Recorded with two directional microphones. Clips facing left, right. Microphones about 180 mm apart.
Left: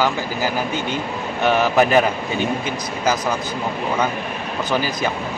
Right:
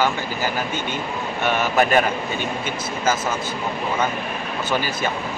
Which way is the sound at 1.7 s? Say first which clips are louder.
Left 1 dB; 15° left (ahead or behind).